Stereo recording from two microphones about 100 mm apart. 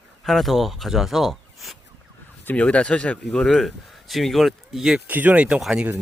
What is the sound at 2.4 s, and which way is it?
Speech, 10° left (ahead or behind).